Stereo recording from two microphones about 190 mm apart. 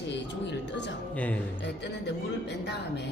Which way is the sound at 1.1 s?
5° left (ahead or behind).